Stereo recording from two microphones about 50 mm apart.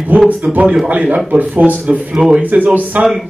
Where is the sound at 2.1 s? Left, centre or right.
Centre.